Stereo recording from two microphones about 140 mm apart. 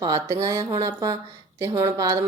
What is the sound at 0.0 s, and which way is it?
Speech, 25° right (ahead or behind).